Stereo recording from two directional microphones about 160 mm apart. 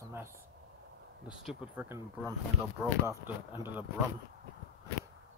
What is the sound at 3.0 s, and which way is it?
Speech, 15° right (ahead or behind).